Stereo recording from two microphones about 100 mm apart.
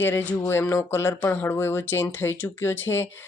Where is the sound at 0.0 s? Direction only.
20° left (ahead or behind).